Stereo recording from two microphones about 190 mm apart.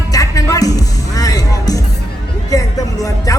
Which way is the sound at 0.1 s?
20° left (ahead or behind).